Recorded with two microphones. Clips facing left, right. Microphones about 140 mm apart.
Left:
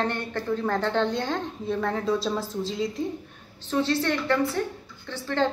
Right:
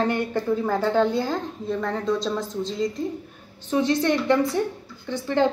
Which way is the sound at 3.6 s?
15° right (ahead or behind).